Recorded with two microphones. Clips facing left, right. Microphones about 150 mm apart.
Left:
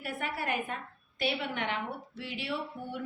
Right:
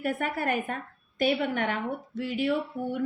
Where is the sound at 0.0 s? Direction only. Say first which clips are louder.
Right 7 dB; 50° right (ahead or behind).